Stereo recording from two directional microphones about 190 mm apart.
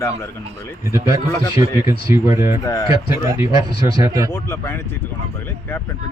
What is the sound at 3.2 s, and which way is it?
Speech, 15° right (ahead or behind).